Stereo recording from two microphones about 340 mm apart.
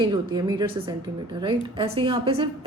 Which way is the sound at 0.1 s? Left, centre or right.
Centre.